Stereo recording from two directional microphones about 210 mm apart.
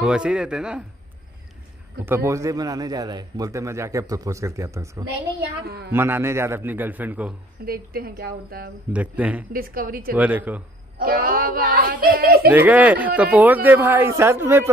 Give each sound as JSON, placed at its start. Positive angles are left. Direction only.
{"t": 0.0, "sound": "a man's voice", "side_deg": -5}
{"t": 2.0, "sound": "a man's voice", "side_deg": -15}
{"t": 7.6, "sound": "speech", "side_deg": -45}
{"t": 8.9, "sound": "a man's voice", "side_deg": -5}
{"t": 9.5, "sound": "speech", "side_deg": -45}
{"t": 10.1, "sound": "a man's voice", "side_deg": -10}
{"t": 11.0, "sound": "speech", "side_deg": -45}
{"t": 12.4, "sound": "a man's voice", "side_deg": -5}